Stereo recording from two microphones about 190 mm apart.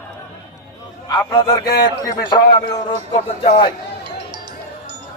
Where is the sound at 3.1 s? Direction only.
35° left (ahead or behind).